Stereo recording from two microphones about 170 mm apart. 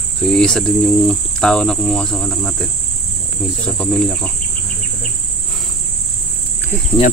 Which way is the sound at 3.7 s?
5° left (ahead or behind).